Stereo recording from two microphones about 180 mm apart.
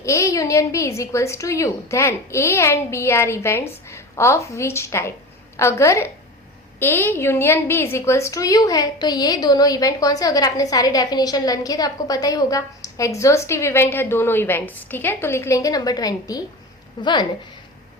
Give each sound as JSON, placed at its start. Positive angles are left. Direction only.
{"t": 0.0, "sound": "a woman's voice", "side_deg": 15}